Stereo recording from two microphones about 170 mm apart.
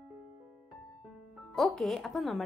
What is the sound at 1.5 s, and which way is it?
Speech, centre (ahead or behind).